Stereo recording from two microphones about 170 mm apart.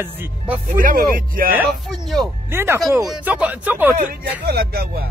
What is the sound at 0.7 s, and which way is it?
Speech, 55° right (ahead or behind).